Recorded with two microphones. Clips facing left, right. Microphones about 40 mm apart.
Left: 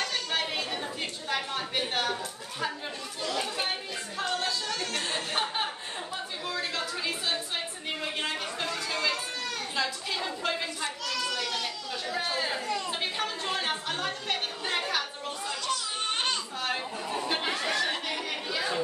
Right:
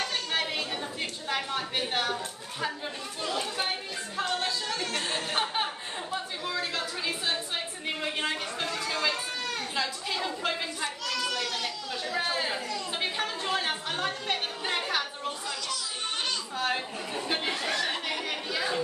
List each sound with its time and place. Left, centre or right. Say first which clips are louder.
0.0 s chatter: even; centre
1.3 s speech: even; centre
4.2 s a sound: right 1 dB; centre
15.4 s children playing: left 2 dB; left
16.5 s chatter: right 2 dB; centre